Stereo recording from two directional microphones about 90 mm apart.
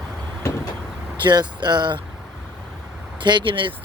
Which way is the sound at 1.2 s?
50° right (ahead or behind).